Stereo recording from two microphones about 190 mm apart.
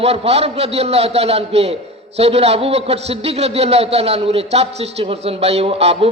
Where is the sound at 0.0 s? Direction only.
35° right (ahead or behind).